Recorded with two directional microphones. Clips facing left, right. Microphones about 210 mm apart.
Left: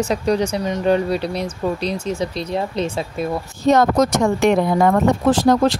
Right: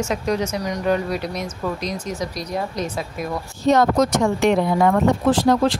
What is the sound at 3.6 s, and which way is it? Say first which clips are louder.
Speech: left 2 dB; 45° left (ahead or behind).